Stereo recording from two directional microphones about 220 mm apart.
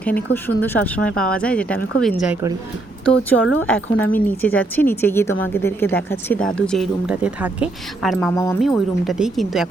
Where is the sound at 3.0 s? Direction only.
5° left (ahead or behind).